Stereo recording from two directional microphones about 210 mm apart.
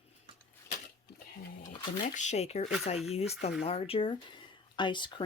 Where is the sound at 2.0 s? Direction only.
35° left (ahead or behind).